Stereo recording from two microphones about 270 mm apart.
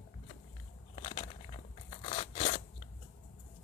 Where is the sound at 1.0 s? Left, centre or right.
Left.